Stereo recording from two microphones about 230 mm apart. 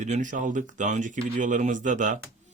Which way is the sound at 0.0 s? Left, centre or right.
Right.